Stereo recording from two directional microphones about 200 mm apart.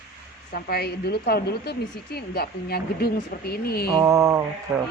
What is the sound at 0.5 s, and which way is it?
A woman's voice, 50° left (ahead or behind).